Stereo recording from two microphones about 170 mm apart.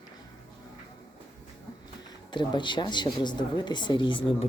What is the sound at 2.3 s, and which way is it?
Speech, 25° left (ahead or behind).